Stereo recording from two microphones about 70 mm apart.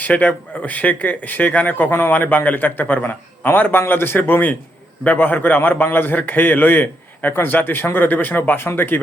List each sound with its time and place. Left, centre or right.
0.0 s speech: left